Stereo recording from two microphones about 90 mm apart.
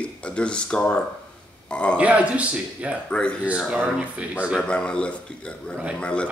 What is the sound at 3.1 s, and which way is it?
Speech, 10° left (ahead or behind).